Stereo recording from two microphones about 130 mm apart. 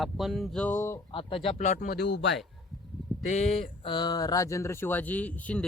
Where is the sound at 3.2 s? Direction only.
60° left (ahead or behind).